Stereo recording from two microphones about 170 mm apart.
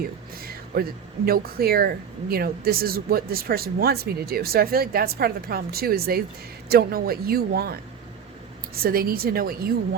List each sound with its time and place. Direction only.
0.4 s speech: 60° right (ahead or behind)